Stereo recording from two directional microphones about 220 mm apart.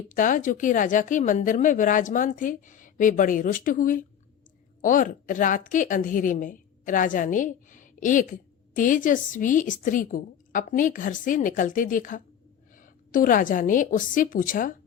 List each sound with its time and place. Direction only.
0.1 s a woman's voice: 35° left (ahead or behind)